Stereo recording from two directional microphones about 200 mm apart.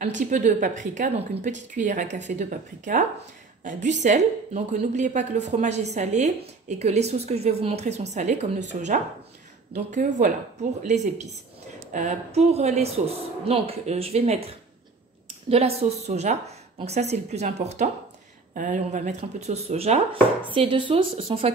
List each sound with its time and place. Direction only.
0.3 s a woman's voice: 40° right (ahead or behind)